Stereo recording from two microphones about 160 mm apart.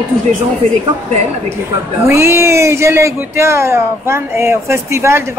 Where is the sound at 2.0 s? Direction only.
15° right (ahead or behind).